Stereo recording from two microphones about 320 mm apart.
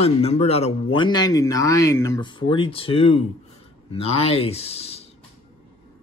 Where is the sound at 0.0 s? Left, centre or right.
Centre.